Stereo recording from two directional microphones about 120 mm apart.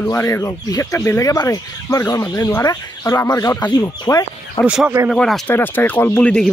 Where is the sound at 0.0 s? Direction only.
20° left (ahead or behind).